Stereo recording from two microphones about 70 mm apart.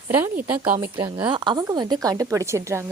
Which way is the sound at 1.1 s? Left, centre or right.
Right.